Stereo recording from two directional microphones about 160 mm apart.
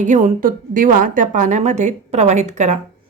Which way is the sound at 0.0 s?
50° right (ahead or behind).